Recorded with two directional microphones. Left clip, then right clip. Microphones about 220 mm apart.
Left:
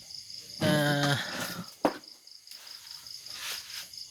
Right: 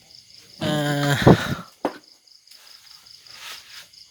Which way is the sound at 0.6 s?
20° right (ahead or behind).